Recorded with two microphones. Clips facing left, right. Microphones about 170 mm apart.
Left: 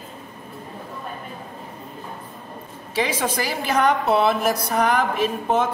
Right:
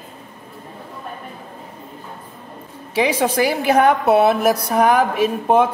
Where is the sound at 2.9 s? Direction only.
65° right (ahead or behind).